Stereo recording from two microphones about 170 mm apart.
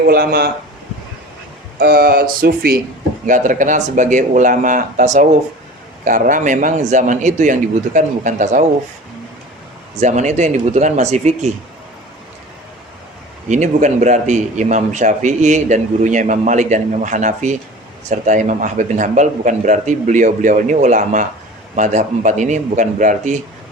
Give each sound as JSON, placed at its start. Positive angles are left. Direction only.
{"t": 0.0, "sound": "speech", "side_deg": -65}
{"t": 1.8, "sound": "speech", "side_deg": -65}
{"t": 3.2, "sound": "a man's voice", "side_deg": -50}
{"t": 10.0, "sound": "a man's voice", "side_deg": -45}
{"t": 13.5, "sound": "a man's voice", "side_deg": -45}